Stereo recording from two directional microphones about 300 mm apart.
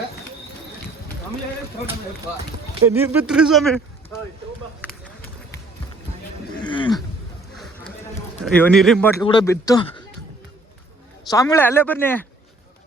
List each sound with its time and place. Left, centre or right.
2.9 s speech: centre
6.7 s speech: centre
8.5 s speech: centre
9.2 s speech: centre
11.3 s speech: centre